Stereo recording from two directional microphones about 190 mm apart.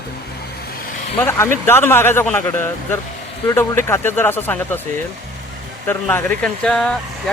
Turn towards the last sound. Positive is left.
turn(degrees=5)  # may be behind; listen again after turning